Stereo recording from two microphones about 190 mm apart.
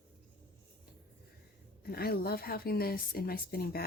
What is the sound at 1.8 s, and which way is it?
A woman's voice, 55° left (ahead or behind).